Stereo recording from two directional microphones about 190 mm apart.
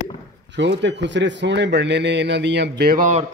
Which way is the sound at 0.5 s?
65° right (ahead or behind).